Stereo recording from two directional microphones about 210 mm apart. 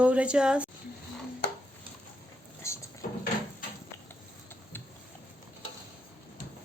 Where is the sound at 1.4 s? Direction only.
50° left (ahead or behind).